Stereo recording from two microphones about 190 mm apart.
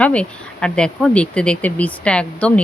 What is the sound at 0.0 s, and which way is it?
Speech, 5° left (ahead or behind).